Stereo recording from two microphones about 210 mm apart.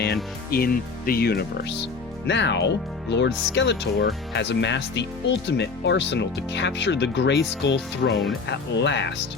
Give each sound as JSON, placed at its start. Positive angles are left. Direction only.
{"t": 0.5, "sound": "speech", "side_deg": 45}